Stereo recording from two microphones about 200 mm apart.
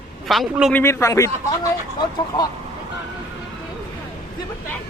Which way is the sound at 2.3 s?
20° left (ahead or behind).